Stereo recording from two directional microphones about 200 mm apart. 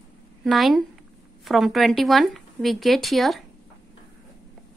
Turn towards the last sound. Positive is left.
turn(degrees=0)  # may be behind; listen again after turning